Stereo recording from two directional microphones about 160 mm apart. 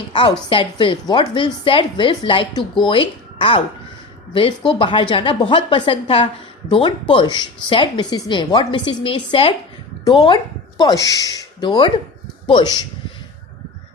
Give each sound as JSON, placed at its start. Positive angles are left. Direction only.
{"t": 0.1, "sound": "speech", "side_deg": 30}